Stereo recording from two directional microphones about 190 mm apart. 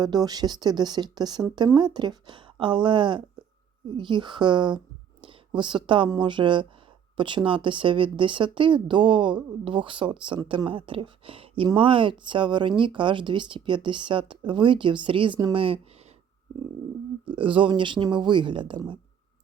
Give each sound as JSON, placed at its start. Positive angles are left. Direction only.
{"t": 0.0, "sound": "speech", "side_deg": -20}
{"t": 17.2, "sound": "speech", "side_deg": -25}